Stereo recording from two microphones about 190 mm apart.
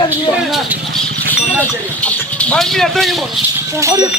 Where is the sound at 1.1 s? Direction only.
55° right (ahead or behind).